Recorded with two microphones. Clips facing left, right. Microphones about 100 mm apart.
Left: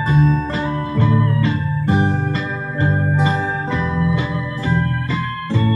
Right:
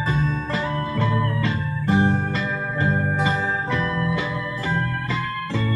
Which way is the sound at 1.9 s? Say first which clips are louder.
Left 1 dB; 20° left (ahead or behind).